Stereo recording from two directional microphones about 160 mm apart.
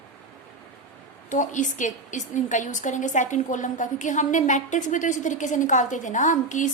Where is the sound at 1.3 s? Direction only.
50° left (ahead or behind).